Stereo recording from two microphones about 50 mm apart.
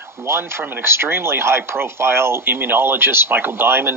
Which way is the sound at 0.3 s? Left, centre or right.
Right.